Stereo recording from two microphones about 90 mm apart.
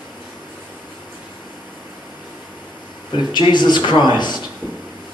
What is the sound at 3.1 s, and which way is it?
Speech, 55° left (ahead or behind).